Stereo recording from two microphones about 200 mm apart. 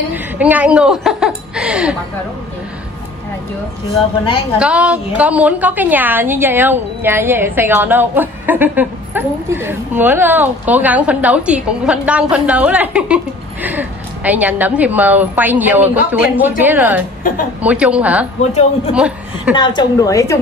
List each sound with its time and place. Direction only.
0.1 s a sound: 10° right (ahead or behind)
4.6 s a woman's voice: 5° right (ahead or behind)
18.4 s speech: 35° left (ahead or behind)
18.9 s a woman's voice: 5° right (ahead or behind)
19.5 s a woman's voice: 25° left (ahead or behind)